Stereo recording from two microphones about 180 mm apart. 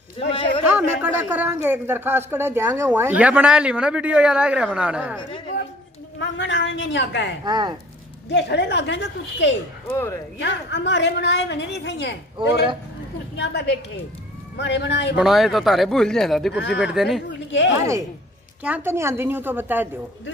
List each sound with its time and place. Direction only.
0.3 s a man's voice: 30° left (ahead or behind)
0.7 s a man's voice: 10° right (ahead or behind)
6.1 s a woman's voice: 85° left
7.4 s speech: 25° right (ahead or behind)
8.3 s a woman's voice: 75° left (ahead or behind)
13.4 s a woman's voice: 70° left (ahead or behind)
15.1 s speech: centre (ahead or behind)
16.5 s a woman's voice: 75° left (ahead or behind)
16.8 s speech: centre (ahead or behind)
17.3 s speech: 90° left
17.7 s a man's voice: 15° right (ahead or behind)